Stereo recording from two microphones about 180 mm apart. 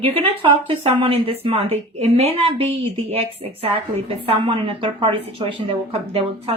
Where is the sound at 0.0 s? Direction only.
30° right (ahead or behind).